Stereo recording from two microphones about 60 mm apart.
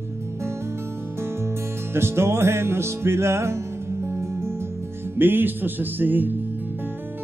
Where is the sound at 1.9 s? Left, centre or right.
Right.